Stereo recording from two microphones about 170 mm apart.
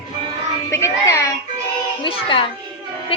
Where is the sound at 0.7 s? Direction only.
15° left (ahead or behind).